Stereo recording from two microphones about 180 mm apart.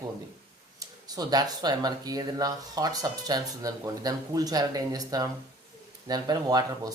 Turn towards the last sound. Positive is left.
turn(degrees=-20)  # may be behind; listen again after turning